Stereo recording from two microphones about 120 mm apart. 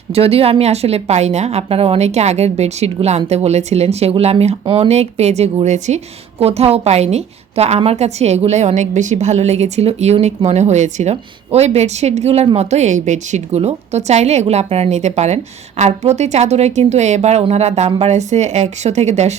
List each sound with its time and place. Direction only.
0.1 s a woman's voice: 55° right (ahead or behind); by 6.0 s 75° right (ahead or behind)
6.4 s a woman's voice: 60° right (ahead or behind)